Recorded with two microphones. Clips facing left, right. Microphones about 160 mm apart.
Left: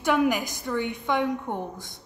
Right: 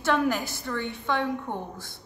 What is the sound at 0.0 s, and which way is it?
A woman's voice, 15° left (ahead or behind).